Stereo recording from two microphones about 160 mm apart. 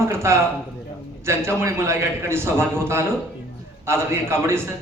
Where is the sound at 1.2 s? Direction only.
15° right (ahead or behind).